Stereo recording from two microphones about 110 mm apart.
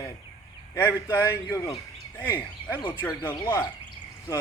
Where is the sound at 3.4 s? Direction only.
35° left (ahead or behind).